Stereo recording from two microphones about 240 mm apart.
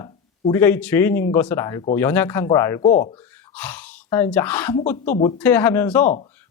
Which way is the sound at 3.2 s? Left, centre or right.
Centre.